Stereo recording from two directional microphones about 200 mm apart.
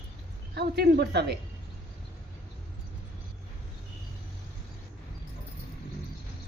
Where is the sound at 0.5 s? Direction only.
55° right (ahead or behind).